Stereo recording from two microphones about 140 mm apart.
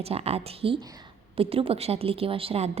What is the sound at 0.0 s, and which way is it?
A woman's voice, 45° right (ahead or behind).